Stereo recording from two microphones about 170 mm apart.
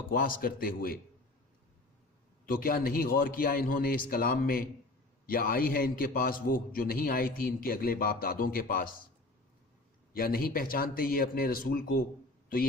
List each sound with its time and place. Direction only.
0.1 s a man's voice: 60° left (ahead or behind)
2.5 s a man's voice: 55° left (ahead or behind)
10.1 s a man's voice: 60° left (ahead or behind)